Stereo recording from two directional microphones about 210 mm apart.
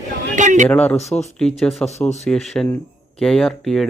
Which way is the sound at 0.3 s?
35° right (ahead or behind).